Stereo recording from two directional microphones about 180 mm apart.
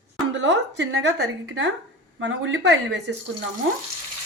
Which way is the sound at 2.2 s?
85° right.